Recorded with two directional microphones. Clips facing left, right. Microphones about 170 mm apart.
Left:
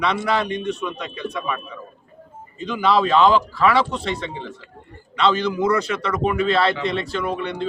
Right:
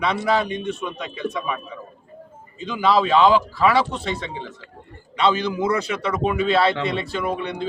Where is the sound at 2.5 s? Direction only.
Centre (ahead or behind).